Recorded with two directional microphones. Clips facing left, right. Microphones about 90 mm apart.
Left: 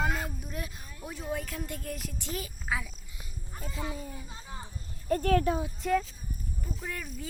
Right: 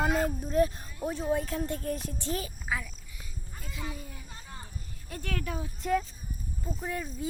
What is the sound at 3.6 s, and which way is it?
Speech, 30° left (ahead or behind).